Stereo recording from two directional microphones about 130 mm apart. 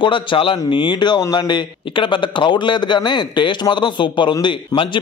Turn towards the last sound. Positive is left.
turn(degrees=40)  # may be behind; listen again after turning